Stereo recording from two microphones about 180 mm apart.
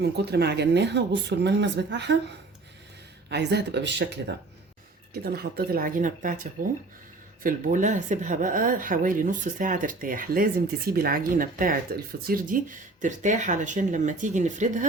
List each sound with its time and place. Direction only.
0.0 s speech: 65° right (ahead or behind)
3.2 s speech: 70° right (ahead or behind)
5.1 s a woman's voice: 60° right (ahead or behind); by 14.8 s 40° right (ahead or behind)